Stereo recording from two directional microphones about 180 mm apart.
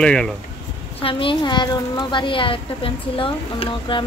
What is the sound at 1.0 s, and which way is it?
A woman's voice, 30° left (ahead or behind).